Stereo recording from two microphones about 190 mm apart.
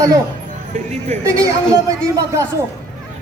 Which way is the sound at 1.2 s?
15° right (ahead or behind).